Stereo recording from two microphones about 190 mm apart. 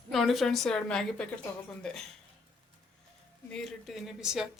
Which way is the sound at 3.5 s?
Centre (ahead or behind).